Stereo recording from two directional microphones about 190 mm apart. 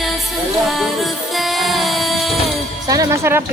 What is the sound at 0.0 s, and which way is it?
Music, centre (ahead or behind).